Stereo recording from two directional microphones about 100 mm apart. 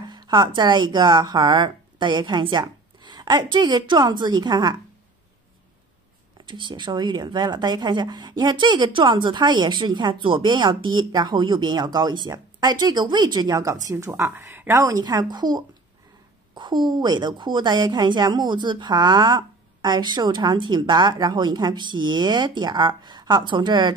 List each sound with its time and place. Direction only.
0.1 s speech: 50° right (ahead or behind)
6.4 s speech: 50° right (ahead or behind); by 14.8 s 25° right (ahead or behind)
14.8 s speech: 35° right (ahead or behind)